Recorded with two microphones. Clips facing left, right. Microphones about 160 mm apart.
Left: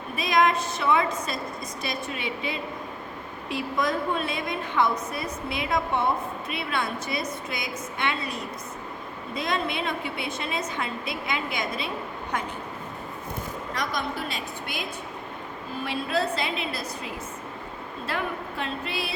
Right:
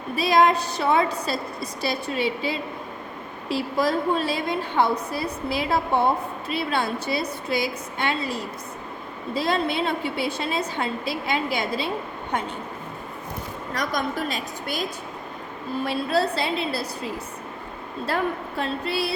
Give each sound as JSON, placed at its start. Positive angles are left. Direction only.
{"t": 0.2, "sound": "a woman's voice", "side_deg": -35}
{"t": 13.7, "sound": "a woman's voice", "side_deg": -45}